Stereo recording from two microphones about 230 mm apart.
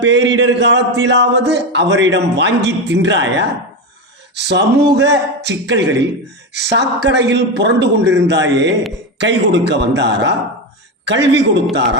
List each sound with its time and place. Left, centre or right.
0.0 s a man's voice: right